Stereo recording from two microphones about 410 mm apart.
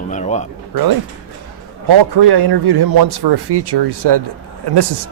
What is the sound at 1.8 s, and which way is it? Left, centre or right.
A man's voice, right.